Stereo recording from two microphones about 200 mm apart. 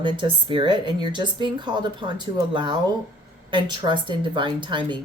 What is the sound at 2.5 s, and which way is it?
Speech, 25° right (ahead or behind).